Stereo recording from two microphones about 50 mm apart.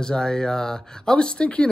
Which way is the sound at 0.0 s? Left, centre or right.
Centre.